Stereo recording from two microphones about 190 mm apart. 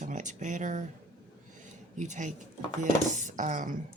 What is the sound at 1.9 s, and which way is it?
Speech, 40° right (ahead or behind).